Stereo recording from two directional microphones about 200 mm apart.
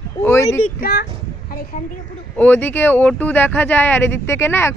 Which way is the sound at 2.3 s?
10° left (ahead or behind).